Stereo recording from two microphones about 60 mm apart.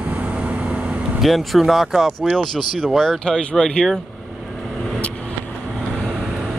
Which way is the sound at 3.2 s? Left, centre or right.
Centre.